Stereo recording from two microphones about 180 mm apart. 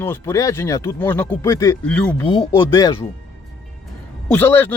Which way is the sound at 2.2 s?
30° left (ahead or behind).